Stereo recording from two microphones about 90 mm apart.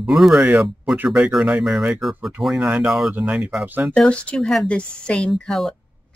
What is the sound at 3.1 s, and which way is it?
Speech, 15° right (ahead or behind).